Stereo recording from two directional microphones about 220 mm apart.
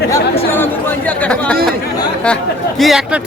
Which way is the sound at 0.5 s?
10° left (ahead or behind).